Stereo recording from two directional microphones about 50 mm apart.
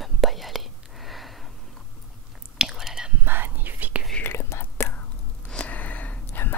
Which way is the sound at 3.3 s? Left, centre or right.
Right.